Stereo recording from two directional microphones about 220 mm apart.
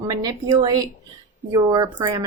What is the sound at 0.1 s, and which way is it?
Speech, 15° right (ahead or behind).